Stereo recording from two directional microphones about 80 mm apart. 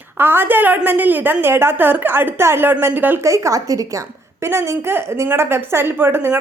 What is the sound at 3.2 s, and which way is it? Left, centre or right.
A woman's voice, right.